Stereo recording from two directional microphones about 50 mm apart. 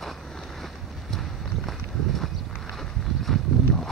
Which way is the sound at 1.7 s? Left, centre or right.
Centre.